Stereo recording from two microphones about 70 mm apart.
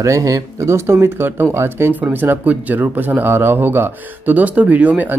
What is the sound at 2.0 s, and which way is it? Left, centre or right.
Speech, right.